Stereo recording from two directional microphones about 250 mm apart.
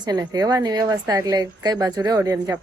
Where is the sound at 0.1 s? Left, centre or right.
Centre.